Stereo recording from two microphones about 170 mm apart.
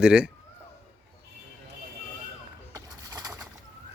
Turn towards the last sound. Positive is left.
turn(degrees=-20)  # may be behind; listen again after turning